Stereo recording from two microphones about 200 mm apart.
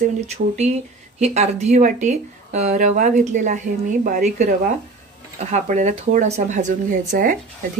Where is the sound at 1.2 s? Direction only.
35° right (ahead or behind).